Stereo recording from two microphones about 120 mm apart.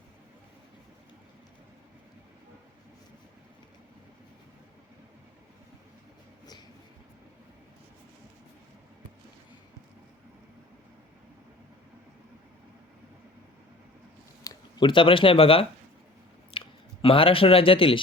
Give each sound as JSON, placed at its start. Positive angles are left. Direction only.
{"t": 14.4, "sound": "speech", "side_deg": 45}